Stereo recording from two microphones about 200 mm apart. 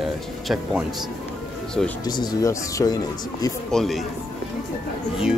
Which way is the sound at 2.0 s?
20° left (ahead or behind).